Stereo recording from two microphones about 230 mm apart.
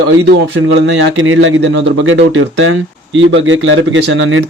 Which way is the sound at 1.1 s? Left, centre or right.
Right.